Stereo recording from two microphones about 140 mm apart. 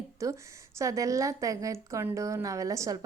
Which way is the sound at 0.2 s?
25° right (ahead or behind).